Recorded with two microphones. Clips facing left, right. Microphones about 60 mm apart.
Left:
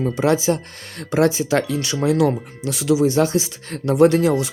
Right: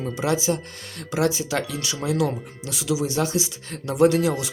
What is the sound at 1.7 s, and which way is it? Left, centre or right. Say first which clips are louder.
Speech: left 7 dB; left.